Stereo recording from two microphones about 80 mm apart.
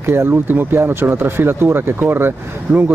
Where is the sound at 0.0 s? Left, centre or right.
Right.